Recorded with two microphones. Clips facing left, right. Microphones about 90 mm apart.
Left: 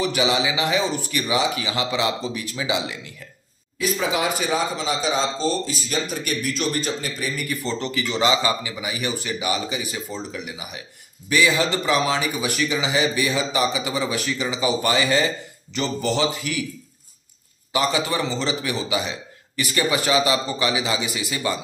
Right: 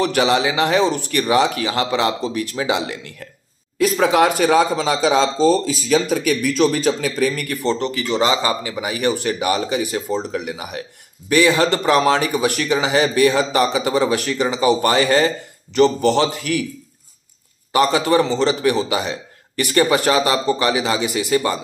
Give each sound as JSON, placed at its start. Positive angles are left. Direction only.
{"t": 0.0, "sound": "a man's voice", "side_deg": -55}
{"t": 0.8, "sound": "speech", "side_deg": -75}
{"t": 1.2, "sound": "a man's voice", "side_deg": -55}
{"t": 7.6, "sound": "a man's voice", "side_deg": -50}
{"t": 8.7, "sound": "a man's voice", "side_deg": -50}
{"t": 17.7, "sound": "a man's voice", "side_deg": -50}